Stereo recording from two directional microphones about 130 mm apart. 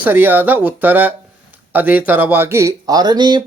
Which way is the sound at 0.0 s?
15° right (ahead or behind).